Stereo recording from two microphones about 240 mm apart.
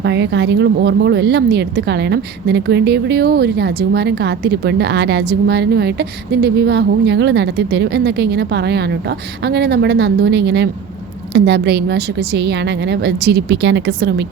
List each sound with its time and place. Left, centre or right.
0.0 s speech: right